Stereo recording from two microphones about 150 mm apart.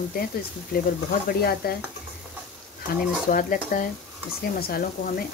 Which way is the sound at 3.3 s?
65° left (ahead or behind).